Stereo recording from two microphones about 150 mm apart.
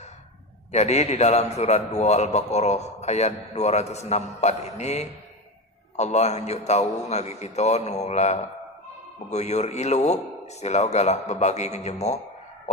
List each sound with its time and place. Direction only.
0.7 s a man's voice: 50° left (ahead or behind)